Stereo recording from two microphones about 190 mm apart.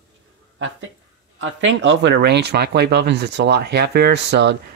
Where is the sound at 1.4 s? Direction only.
75° right (ahead or behind).